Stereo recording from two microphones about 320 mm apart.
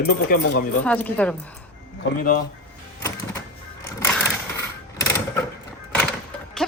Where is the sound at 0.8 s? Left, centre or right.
Centre.